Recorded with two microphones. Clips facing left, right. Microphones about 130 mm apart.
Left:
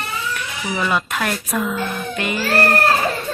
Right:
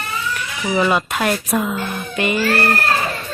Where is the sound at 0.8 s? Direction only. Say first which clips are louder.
Right 4 dB; 15° right (ahead or behind).